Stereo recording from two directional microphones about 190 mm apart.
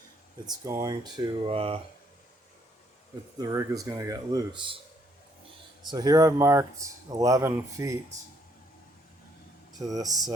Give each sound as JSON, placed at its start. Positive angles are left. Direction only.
{"t": 0.4, "sound": "speech", "side_deg": -15}
{"t": 3.3, "sound": "speech", "side_deg": -15}
{"t": 5.8, "sound": "speech", "side_deg": -20}
{"t": 9.9, "sound": "speech", "side_deg": -20}